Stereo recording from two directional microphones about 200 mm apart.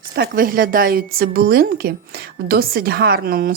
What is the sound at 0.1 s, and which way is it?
Speech, 45° right (ahead or behind).